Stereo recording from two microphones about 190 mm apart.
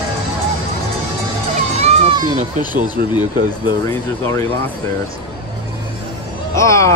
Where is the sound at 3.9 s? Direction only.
15° left (ahead or behind).